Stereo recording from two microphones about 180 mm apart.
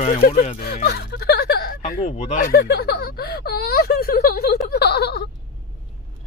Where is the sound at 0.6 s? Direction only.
60° left (ahead or behind); by 2.5 s 40° left (ahead or behind).